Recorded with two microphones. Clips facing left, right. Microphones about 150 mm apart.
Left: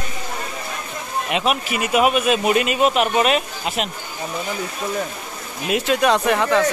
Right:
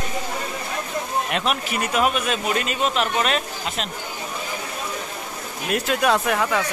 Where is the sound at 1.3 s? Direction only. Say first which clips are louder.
Left 7 dB; 5° left (ahead or behind).